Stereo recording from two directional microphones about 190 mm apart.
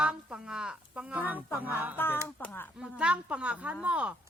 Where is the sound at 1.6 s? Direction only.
10° right (ahead or behind).